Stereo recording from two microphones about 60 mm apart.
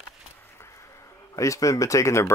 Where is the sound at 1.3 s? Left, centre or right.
Left.